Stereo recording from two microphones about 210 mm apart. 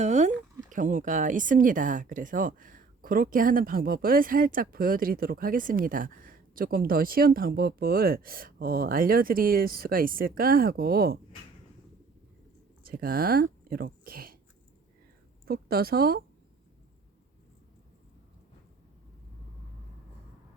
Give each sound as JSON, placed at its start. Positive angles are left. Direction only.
{"t": 0.0, "sound": "speech", "side_deg": -35}
{"t": 12.8, "sound": "speech", "side_deg": -45}
{"t": 15.4, "sound": "speech", "side_deg": -45}